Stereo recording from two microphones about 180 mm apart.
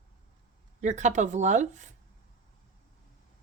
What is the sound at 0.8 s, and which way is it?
Speech, 40° right (ahead or behind).